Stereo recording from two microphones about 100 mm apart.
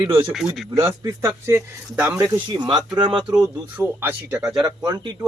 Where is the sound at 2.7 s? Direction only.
45° right (ahead or behind).